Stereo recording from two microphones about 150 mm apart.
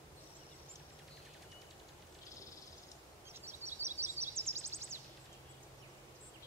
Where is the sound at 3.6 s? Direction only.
15° right (ahead or behind).